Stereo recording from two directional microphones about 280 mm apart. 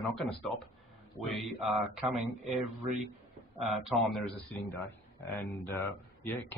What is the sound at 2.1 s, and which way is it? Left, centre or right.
Speech, right.